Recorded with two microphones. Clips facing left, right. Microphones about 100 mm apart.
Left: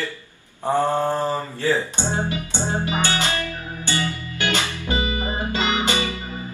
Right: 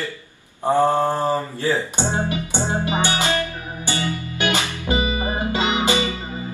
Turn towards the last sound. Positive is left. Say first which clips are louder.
# right 3 dB
turn(degrees=-20)  # may be behind; listen again after turning